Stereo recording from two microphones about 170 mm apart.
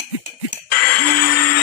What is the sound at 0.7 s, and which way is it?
Music, 60° left (ahead or behind).